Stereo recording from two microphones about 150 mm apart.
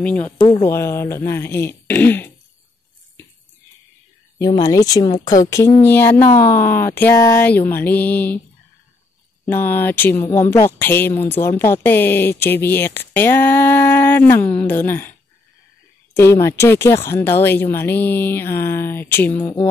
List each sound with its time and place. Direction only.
0.0 s a woman's voice: 10° left (ahead or behind)
0.4 s speech: 35° left (ahead or behind)
0.7 s a woman's voice: 15° left (ahead or behind)
4.4 s a woman's voice: 25° left (ahead or behind)
9.5 s a woman's voice: 15° left (ahead or behind)